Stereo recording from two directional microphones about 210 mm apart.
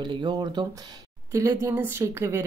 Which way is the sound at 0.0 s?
20° right (ahead or behind).